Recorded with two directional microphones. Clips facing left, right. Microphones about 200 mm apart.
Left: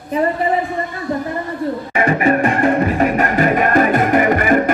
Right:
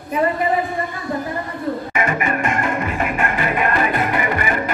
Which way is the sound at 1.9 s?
35° left (ahead or behind).